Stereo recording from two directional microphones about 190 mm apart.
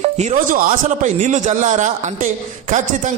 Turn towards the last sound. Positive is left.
turn(degrees=-40)  # may be behind; listen again after turning